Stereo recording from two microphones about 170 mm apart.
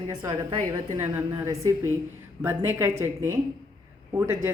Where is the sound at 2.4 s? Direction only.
15° right (ahead or behind).